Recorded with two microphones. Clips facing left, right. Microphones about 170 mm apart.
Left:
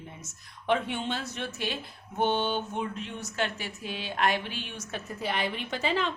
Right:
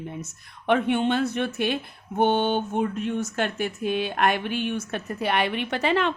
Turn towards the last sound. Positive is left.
turn(degrees=-65)  # may be behind; listen again after turning